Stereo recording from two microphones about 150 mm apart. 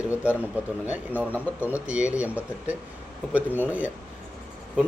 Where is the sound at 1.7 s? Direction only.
5° right (ahead or behind).